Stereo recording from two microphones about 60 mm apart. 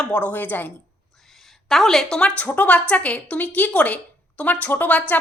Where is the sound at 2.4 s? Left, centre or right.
Left.